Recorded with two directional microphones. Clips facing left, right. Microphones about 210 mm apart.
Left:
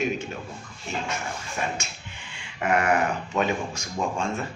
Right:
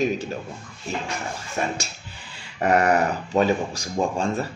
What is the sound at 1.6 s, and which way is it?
Speech, 40° right (ahead or behind).